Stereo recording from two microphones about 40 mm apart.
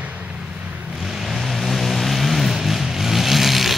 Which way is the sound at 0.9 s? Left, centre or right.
Centre.